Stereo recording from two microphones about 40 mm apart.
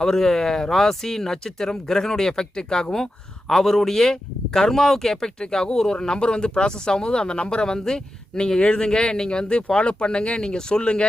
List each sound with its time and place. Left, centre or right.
0.0 s speech: centre